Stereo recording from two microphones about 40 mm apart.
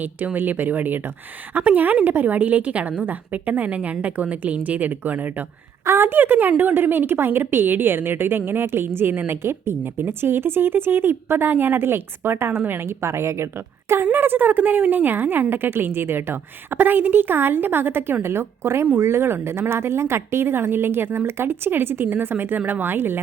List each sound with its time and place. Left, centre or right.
0.3 s a woman's voice: right
6.0 s a woman's voice: right
14.2 s a woman's voice: right